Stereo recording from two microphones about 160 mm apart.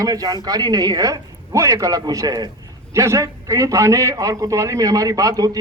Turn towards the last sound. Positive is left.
turn(degrees=-25)  # may be behind; listen again after turning